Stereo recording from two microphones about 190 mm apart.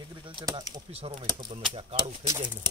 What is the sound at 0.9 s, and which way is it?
Speech, 30° right (ahead or behind).